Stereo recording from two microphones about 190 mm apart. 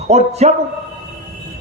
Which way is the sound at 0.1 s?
35° right (ahead or behind).